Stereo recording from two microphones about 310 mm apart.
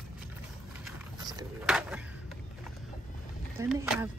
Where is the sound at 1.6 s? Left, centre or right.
Centre.